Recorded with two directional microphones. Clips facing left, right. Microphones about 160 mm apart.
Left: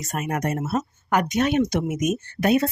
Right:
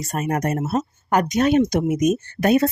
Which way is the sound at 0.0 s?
35° right (ahead or behind).